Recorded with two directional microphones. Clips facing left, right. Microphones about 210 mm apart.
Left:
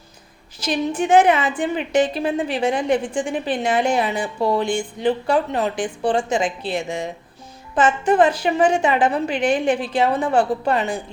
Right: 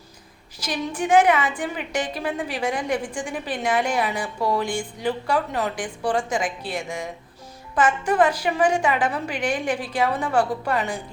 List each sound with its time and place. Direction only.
0.6 s a woman's voice: 25° left (ahead or behind)